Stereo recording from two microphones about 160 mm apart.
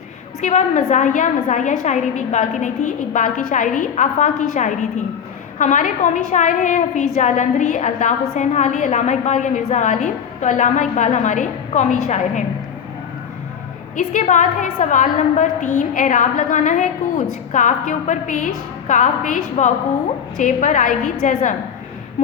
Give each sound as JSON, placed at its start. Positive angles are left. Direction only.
{"t": 0.4, "sound": "a woman's voice", "side_deg": 50}
{"t": 13.9, "sound": "a woman's voice", "side_deg": 50}